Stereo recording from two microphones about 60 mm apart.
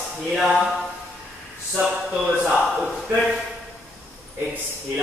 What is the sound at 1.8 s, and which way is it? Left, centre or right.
Speech, centre.